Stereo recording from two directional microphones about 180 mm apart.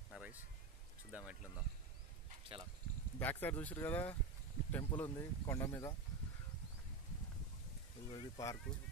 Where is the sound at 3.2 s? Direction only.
10° left (ahead or behind).